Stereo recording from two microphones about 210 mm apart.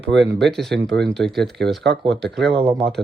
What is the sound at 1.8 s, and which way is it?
Speech, 55° right (ahead or behind).